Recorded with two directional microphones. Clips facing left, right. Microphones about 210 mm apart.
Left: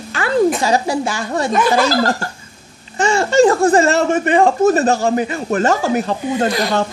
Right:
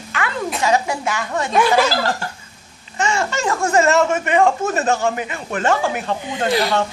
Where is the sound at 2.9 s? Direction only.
30° left (ahead or behind).